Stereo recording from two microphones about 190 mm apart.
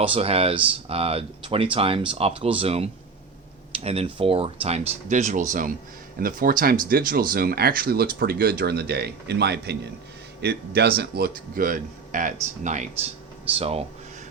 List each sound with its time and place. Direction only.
0.0 s speech: 30° right (ahead or behind)